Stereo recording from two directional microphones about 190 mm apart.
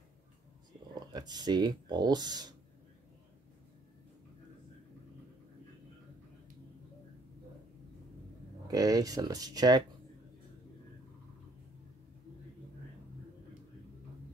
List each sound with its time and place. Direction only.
0.9 s speech: 20° right (ahead or behind)
8.6 s speech: 20° right (ahead or behind)